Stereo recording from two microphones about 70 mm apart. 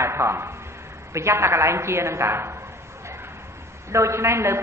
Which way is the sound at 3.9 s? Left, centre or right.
Right.